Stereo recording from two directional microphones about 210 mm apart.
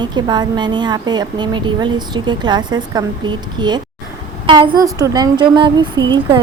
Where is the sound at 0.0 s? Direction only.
20° right (ahead or behind).